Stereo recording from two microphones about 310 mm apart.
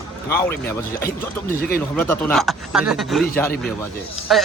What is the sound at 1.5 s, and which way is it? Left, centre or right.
Speech, left.